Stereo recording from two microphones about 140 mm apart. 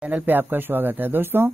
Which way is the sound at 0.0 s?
10° right (ahead or behind).